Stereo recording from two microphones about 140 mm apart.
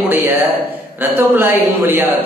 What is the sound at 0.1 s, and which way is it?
Speech, 15° right (ahead or behind).